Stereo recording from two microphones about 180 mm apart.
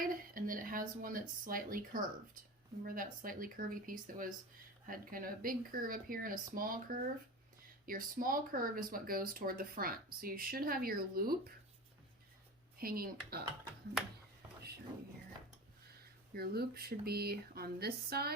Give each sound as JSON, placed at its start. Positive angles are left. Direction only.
{"t": 0.0, "sound": "a woman's voice", "side_deg": -50}
{"t": 12.8, "sound": "speech", "side_deg": -55}
{"t": 16.3, "sound": "speech", "side_deg": -60}